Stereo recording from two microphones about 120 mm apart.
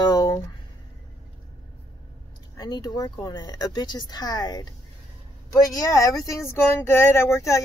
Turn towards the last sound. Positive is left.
turn(degrees=25)  # may be behind; listen again after turning